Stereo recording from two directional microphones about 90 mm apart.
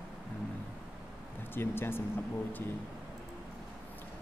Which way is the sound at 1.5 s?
25° left (ahead or behind).